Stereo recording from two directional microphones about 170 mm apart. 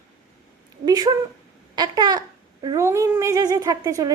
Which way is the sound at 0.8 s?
20° right (ahead or behind).